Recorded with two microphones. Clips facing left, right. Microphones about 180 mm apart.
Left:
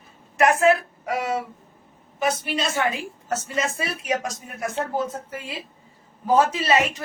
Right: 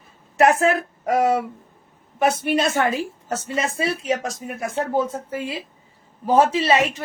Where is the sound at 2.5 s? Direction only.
55° right (ahead or behind).